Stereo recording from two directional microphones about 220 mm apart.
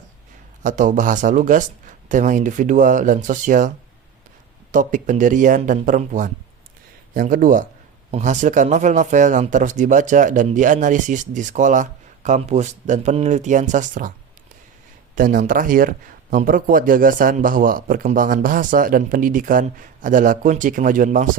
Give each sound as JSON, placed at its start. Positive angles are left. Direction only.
{"t": 0.6, "sound": "speech", "side_deg": -35}
{"t": 4.7, "sound": "speech", "side_deg": -35}
{"t": 15.1, "sound": "speech", "side_deg": -35}